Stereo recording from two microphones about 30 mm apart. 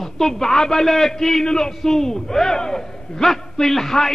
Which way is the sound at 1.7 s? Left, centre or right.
Centre.